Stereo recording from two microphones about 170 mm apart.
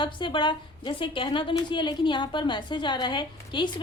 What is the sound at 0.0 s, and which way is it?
A woman's voice, 30° left (ahead or behind).